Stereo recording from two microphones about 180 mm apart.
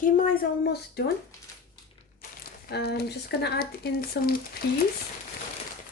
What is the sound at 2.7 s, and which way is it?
Speech, 65° left (ahead or behind).